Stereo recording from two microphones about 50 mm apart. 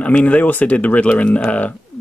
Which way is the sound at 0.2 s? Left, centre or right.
Left.